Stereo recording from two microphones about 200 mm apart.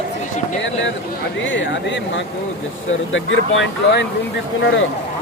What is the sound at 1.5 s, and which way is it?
Speech, 70° left (ahead or behind).